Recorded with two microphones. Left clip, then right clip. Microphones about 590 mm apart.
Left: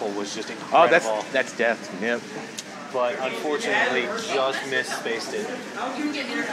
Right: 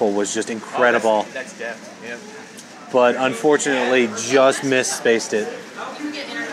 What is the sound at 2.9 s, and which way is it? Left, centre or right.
Speech, right.